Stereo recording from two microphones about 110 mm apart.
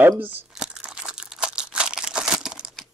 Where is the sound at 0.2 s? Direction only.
15° right (ahead or behind).